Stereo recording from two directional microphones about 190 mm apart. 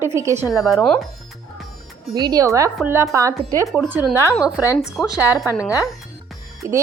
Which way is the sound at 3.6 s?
Centre (ahead or behind).